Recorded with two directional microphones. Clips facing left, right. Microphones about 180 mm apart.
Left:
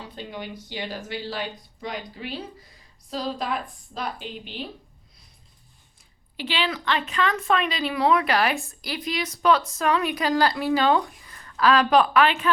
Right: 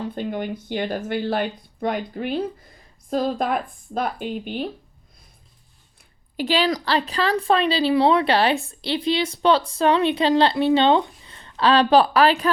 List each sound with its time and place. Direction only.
0.0 s speech: 50° right (ahead or behind)
6.3 s a woman's voice: 45° right (ahead or behind)